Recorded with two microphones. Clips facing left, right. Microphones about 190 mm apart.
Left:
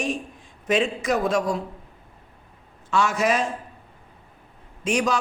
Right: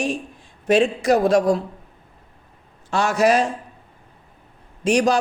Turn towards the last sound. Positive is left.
turn(degrees=-35)  # may be behind; listen again after turning